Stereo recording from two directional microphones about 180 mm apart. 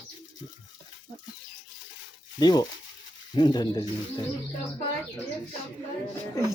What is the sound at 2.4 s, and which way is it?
Speech, 20° left (ahead or behind).